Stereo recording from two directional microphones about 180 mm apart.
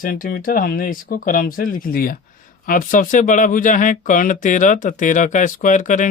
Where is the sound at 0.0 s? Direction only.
55° left (ahead or behind).